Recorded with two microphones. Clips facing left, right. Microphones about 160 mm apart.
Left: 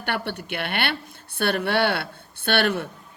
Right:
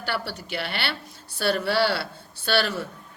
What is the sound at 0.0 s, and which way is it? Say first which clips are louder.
A woman's voice: left 2 dB; 55° left (ahead or behind).